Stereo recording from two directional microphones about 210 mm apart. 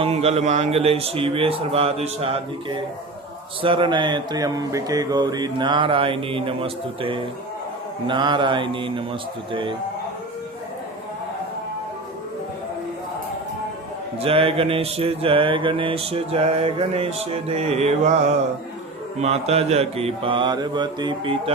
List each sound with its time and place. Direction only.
0.0 s mantra: 30° right (ahead or behind)
14.2 s mantra: 25° right (ahead or behind)
19.2 s mantra: 30° right (ahead or behind)